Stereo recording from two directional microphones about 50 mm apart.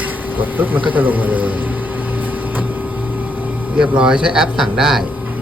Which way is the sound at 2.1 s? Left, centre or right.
Right.